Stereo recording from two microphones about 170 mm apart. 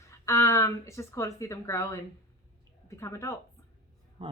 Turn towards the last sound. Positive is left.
turn(degrees=-30)  # may be behind; listen again after turning